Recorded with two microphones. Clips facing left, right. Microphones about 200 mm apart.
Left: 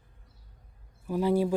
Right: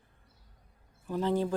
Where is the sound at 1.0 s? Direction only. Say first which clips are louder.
Left 4 dB; 10° left (ahead or behind).